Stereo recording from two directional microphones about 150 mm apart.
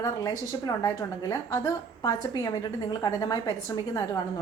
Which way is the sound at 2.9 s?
25° left (ahead or behind).